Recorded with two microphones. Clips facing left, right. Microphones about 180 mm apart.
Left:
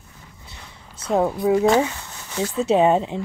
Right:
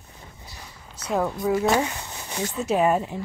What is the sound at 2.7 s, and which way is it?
Speech, 25° left (ahead or behind).